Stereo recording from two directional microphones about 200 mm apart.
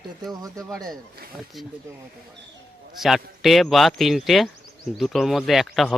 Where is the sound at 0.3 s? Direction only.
15° right (ahead or behind).